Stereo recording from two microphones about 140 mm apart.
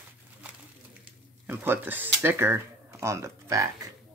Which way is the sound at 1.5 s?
15° right (ahead or behind).